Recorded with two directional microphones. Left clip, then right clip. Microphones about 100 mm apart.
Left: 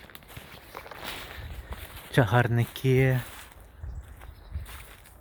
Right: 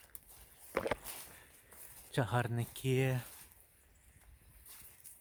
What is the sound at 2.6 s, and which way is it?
Speech, 15° right (ahead or behind).